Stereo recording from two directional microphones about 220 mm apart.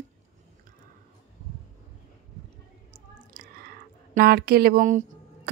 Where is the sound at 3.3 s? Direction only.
40° right (ahead or behind).